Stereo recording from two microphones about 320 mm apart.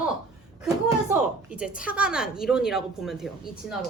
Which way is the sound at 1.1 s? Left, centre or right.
Centre.